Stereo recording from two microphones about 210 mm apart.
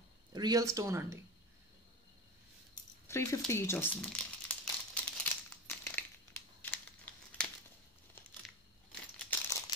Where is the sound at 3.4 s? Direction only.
10° left (ahead or behind).